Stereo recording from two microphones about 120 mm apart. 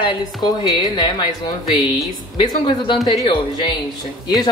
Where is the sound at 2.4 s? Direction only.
40° left (ahead or behind).